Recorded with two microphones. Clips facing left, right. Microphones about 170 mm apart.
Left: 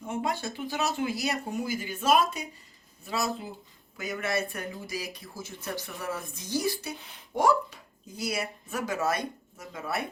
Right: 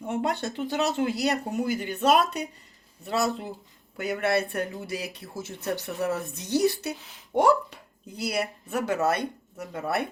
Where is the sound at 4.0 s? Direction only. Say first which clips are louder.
Right 5 dB; 65° right (ahead or behind).